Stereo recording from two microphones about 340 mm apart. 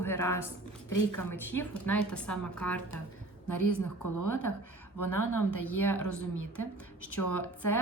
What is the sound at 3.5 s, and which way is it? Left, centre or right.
Speech, left.